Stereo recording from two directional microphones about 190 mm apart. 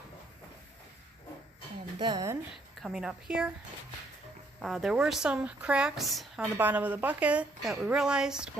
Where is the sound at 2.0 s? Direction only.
20° right (ahead or behind).